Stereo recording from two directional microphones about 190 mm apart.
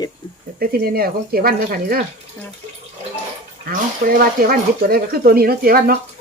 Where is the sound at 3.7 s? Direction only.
50° right (ahead or behind).